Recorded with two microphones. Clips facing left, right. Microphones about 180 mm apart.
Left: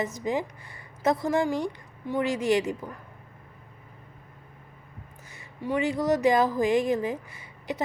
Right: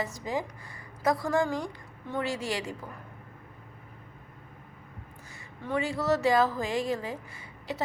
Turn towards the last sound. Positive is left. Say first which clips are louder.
# left 3 dB
turn(degrees=20)  # may be behind; listen again after turning